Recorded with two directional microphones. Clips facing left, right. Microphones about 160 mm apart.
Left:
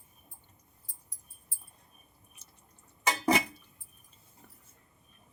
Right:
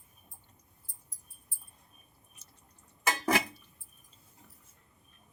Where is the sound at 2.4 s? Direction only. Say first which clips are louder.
Left 1 dB; 60° left (ahead or behind).